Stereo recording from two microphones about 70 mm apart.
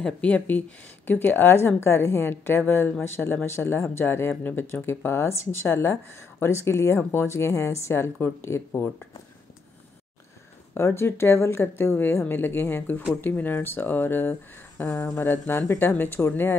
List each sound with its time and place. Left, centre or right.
0.0 s speech: centre; by 8.9 s left
10.7 s speech: left